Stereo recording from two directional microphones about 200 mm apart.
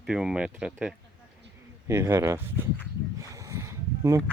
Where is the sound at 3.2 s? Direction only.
15° right (ahead or behind).